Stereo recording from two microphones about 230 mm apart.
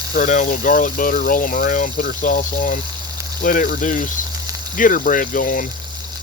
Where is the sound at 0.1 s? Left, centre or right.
Left.